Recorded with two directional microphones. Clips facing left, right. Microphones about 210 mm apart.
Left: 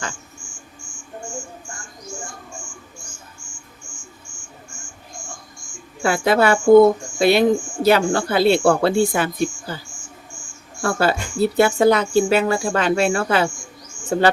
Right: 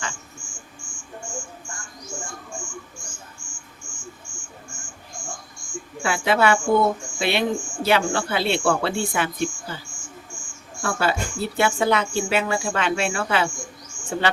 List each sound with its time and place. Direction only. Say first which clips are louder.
6.0 s speech: left 4 dB; 40° left (ahead or behind)
10.8 s speech: left 4 dB; 40° left (ahead or behind)